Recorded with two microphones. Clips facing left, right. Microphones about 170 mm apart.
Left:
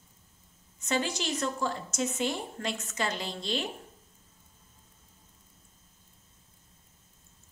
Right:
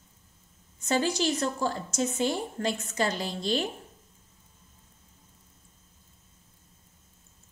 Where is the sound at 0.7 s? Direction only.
35° right (ahead or behind).